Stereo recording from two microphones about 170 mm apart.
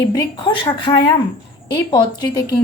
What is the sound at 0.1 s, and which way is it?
A woman's voice, 30° left (ahead or behind).